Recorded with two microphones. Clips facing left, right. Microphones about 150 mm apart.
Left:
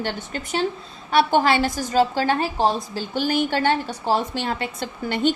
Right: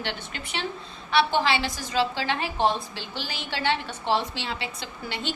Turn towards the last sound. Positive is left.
turn(degrees=50)  # may be behind; listen again after turning